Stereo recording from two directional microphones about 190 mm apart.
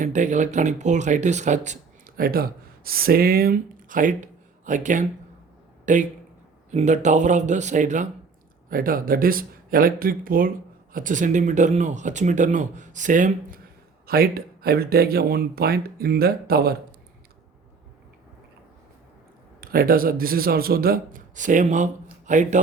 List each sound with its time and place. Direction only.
0.0 s speech: 40° right (ahead or behind)
19.6 s speech: 50° right (ahead or behind)